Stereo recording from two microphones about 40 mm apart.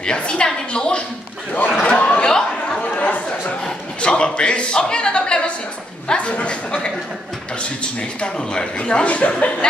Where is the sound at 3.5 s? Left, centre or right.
Centre.